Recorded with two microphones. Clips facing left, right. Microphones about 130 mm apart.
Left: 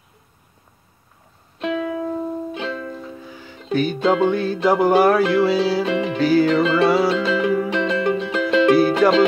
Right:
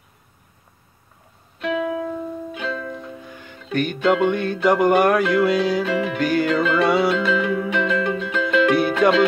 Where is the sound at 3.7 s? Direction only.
5° left (ahead or behind).